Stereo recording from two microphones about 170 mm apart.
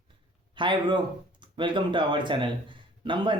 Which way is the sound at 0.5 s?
30° right (ahead or behind).